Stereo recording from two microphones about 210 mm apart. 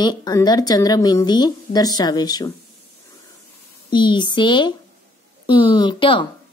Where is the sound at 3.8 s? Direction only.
20° left (ahead or behind).